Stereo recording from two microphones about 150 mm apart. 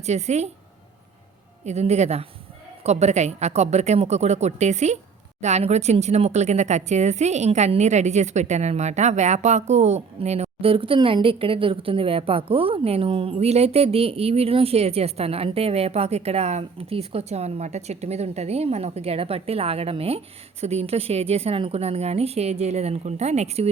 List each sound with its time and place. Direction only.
0.0 s a woman's voice: 45° right (ahead or behind)
1.6 s a woman's voice: 45° right (ahead or behind)